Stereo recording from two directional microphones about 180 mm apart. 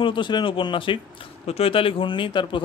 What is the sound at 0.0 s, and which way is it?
A man's voice, 25° left (ahead or behind).